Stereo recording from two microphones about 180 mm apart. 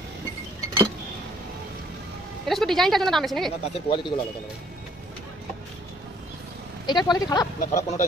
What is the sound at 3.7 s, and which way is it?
Speech, 25° left (ahead or behind).